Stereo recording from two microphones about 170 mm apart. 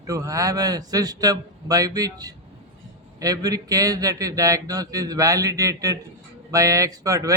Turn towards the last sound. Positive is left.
turn(degrees=-20)  # may be behind; listen again after turning